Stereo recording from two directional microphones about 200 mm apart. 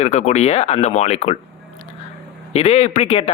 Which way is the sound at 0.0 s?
35° left (ahead or behind).